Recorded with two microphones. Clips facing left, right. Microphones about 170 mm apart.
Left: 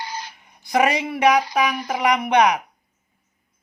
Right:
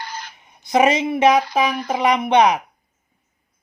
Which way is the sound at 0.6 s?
20° right (ahead or behind).